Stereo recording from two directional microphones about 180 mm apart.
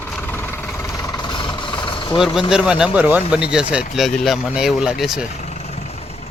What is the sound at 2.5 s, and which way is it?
Speech, 5° right (ahead or behind).